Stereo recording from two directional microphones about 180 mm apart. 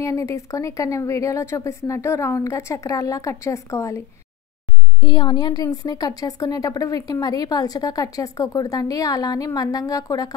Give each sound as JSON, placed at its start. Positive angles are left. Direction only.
{"t": 0.0, "sound": "a woman's voice", "side_deg": 15}
{"t": 5.0, "sound": "a woman's voice", "side_deg": 25}